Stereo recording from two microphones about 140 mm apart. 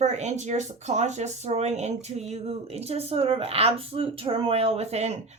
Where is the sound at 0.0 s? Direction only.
55° right (ahead or behind).